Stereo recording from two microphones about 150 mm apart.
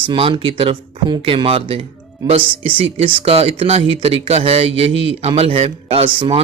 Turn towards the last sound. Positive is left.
turn(degrees=-35)  # may be behind; listen again after turning